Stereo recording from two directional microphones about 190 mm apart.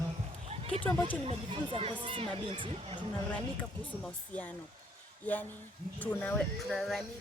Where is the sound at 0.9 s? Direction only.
10° left (ahead or behind).